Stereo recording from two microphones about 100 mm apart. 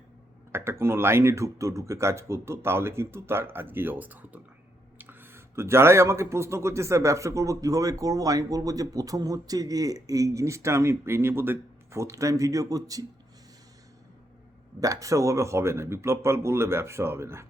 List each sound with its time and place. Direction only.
0.5 s speech: 25° right (ahead or behind)
14.8 s speech: 35° right (ahead or behind)